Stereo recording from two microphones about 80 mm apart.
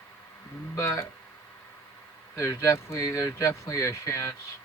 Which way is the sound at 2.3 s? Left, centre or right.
Left.